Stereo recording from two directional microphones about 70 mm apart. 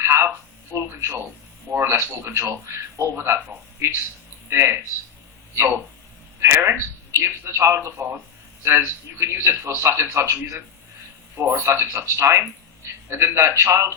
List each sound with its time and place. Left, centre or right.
0.0 s telephone: right
0.9 s a man's voice: right
6.4 s a man's voice: right